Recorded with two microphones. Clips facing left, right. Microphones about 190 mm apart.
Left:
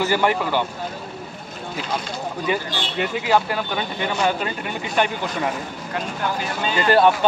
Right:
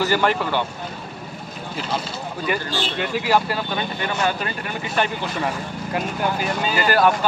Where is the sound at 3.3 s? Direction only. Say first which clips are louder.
Even; 15° left (ahead or behind).